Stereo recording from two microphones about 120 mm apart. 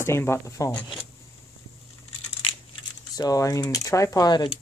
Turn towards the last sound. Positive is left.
turn(degrees=35)  # may be behind; listen again after turning